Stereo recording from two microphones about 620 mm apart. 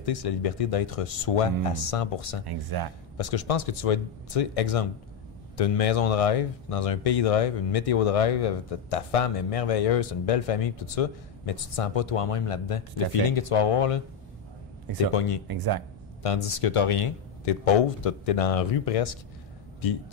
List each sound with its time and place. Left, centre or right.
0.0 s speech: left
2.4 s speech: right
3.2 s speech: left
15.1 s speech: left
15.4 s speech: right
16.2 s speech: left